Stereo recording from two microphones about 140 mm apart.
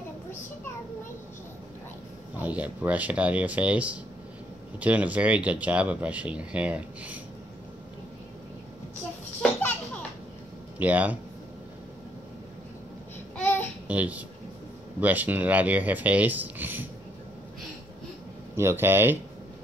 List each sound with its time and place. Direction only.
2.4 s speech: 10° right (ahead or behind)
10.8 s speech: 10° right (ahead or behind)
13.4 s babbling: 15° left (ahead or behind)
13.8 s speech: 10° right (ahead or behind)
18.6 s speech: 15° right (ahead or behind)